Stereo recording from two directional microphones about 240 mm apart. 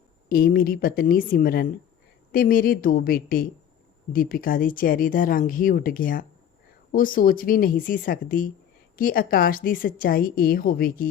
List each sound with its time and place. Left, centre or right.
0.3 s a woman's voice: left